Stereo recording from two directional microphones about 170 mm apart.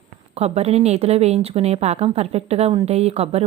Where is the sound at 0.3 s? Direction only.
40° right (ahead or behind).